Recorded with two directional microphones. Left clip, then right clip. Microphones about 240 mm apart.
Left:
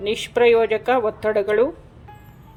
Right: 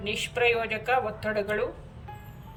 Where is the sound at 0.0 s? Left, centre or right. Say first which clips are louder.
Left 8 dB; left.